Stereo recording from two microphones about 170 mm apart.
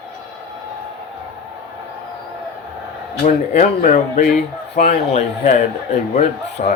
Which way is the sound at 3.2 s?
45° left (ahead or behind).